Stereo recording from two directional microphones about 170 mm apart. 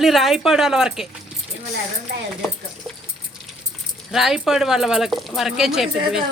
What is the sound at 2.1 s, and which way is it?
Speech, 75° right (ahead or behind).